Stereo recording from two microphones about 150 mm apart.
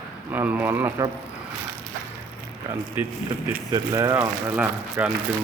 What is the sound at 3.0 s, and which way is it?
Speech, 10° right (ahead or behind).